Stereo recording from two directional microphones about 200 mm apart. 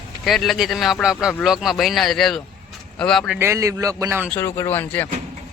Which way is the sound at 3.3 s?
10° right (ahead or behind).